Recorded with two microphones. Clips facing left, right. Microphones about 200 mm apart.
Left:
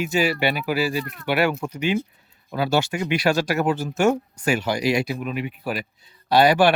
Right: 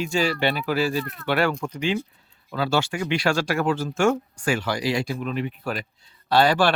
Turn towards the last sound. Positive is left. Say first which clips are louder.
# left 3 dB
turn(degrees=15)  # may be behind; listen again after turning